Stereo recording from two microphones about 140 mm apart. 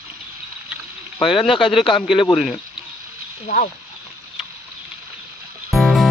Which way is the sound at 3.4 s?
65° left (ahead or behind).